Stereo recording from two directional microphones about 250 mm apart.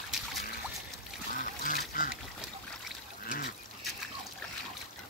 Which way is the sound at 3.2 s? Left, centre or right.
Left.